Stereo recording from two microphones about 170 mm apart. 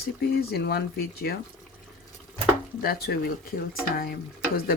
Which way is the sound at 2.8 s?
65° left (ahead or behind).